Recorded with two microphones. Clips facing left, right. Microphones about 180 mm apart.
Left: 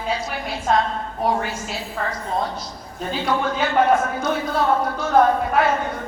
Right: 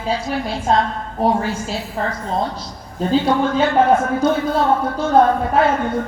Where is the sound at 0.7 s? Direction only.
30° right (ahead or behind).